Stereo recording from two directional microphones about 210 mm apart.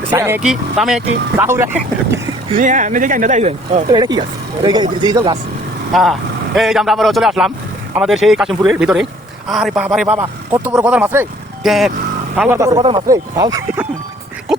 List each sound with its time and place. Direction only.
0.1 s a man's voice: 10° right (ahead or behind)
2.6 s speech: 35° right (ahead or behind)
3.9 s speech: 20° right (ahead or behind)
5.9 s a man's voice: centre (ahead or behind)
12.4 s speech: 10° right (ahead or behind)